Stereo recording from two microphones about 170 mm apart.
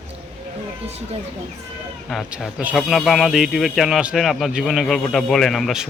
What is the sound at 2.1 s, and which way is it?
Speech, centre (ahead or behind).